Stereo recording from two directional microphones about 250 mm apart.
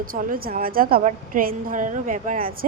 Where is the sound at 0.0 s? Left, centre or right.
Right.